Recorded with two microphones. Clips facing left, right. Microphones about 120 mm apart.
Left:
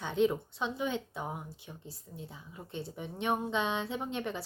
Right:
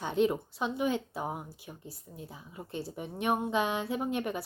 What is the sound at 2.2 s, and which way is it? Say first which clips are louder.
Speech: right 1 dB; 25° right (ahead or behind).